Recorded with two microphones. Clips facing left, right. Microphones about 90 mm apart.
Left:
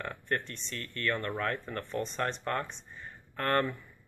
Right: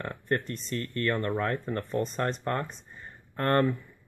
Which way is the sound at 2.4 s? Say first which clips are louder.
Right 3 dB; 25° right (ahead or behind).